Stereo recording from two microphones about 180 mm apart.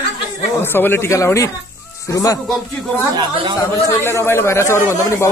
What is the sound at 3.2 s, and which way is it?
Speech, 25° right (ahead or behind).